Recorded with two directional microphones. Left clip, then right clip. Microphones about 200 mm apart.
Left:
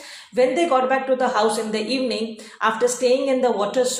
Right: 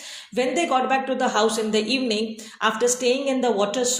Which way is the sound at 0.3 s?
40° right (ahead or behind).